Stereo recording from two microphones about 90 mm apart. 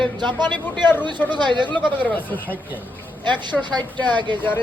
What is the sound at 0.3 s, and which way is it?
A man's voice, 60° right (ahead or behind).